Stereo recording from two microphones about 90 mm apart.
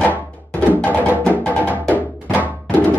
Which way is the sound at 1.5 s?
20° right (ahead or behind).